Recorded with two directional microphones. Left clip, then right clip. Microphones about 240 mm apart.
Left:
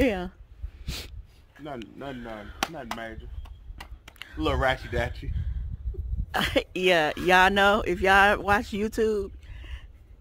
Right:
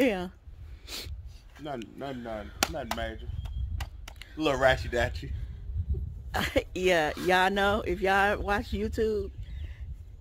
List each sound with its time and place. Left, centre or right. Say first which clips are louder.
0.0 s a sound: left 1 dB; centre
1.6 s speech: even; centre
2.6 s chop: right 1 dB; centre
4.4 s speech: right 1 dB; centre
6.3 s speech: left 3 dB; left